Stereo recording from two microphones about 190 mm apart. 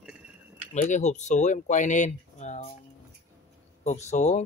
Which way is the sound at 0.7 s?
40° left (ahead or behind).